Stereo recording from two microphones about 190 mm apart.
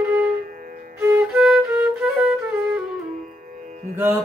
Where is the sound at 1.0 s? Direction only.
10° right (ahead or behind).